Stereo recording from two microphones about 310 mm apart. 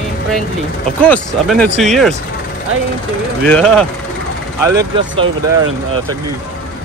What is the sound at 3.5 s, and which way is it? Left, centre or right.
Speech, centre.